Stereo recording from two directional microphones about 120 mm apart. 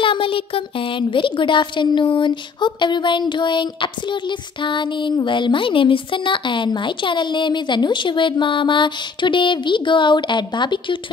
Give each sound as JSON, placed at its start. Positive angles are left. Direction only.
{"t": 0.0, "sound": "a woman's voice", "side_deg": 45}